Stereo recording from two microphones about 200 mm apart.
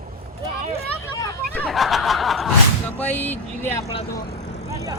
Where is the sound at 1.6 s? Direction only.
Centre (ahead or behind).